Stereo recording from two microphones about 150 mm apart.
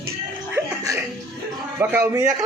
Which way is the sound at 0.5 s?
20° right (ahead or behind).